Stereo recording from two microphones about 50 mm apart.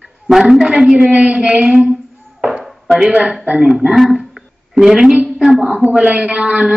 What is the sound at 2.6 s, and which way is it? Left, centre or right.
Chopping, centre.